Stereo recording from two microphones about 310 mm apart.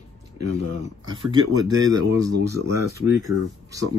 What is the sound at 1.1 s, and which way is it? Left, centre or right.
Speech, centre.